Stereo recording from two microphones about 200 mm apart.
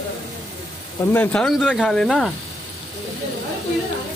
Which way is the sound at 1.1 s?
5° left (ahead or behind).